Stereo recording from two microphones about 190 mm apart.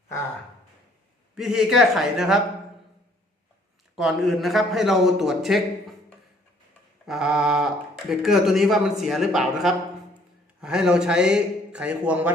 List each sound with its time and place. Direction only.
1.4 s a man's voice: centre (ahead or behind)
3.9 s a man's voice: centre (ahead or behind)
7.0 s a man's voice: centre (ahead or behind)